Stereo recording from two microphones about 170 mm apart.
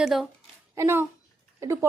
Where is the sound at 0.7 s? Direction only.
15° right (ahead or behind).